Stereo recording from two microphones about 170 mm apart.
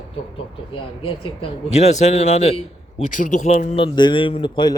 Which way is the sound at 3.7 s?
30° left (ahead or behind).